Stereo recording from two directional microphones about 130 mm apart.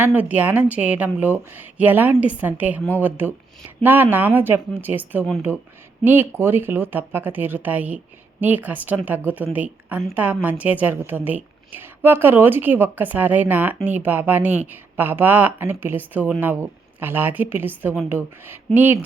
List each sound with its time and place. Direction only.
0.0 s a woman's voice: 15° right (ahead or behind)